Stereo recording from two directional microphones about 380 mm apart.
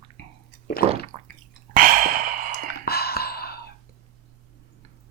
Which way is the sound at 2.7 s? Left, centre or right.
Left.